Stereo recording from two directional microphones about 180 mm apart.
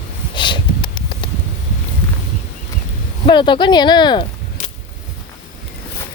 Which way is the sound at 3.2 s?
25° left (ahead or behind).